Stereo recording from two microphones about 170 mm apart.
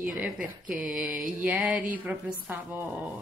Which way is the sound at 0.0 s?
5° right (ahead or behind).